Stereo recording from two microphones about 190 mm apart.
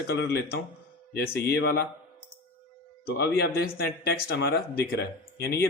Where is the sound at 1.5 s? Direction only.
60° left (ahead or behind).